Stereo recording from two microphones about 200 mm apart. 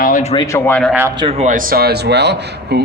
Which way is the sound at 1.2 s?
30° right (ahead or behind).